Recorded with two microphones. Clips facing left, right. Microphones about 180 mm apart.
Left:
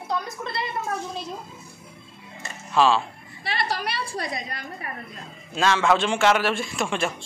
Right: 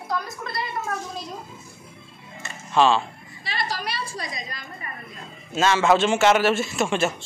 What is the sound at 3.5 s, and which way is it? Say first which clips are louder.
A woman's voice: left 2 dB; 60° left (ahead or behind).